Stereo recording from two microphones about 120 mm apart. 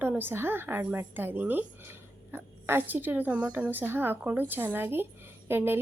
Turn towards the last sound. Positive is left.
turn(degrees=-20)  # may be behind; listen again after turning